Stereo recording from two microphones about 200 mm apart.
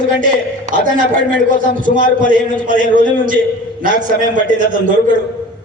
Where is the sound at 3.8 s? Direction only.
45° right (ahead or behind).